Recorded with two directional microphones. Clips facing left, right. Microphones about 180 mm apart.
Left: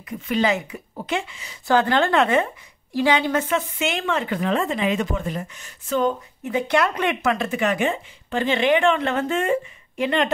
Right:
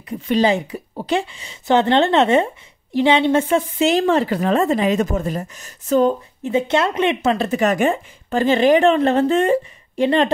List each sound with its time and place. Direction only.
0.1 s speech: 30° right (ahead or behind)